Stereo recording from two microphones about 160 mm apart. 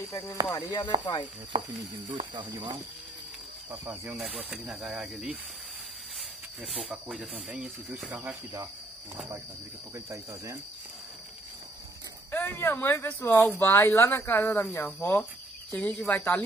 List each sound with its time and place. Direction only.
0.1 s a sound: 20° left (ahead or behind)
0.5 s speech: 15° left (ahead or behind)
2.1 s speech: 30° right (ahead or behind)
3.7 s speech: 15° right (ahead or behind)
6.6 s speech: 5° right (ahead or behind)
12.3 s speech: 15° left (ahead or behind)